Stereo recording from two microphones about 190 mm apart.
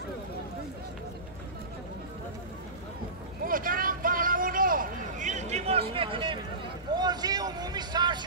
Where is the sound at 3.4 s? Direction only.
45° right (ahead or behind).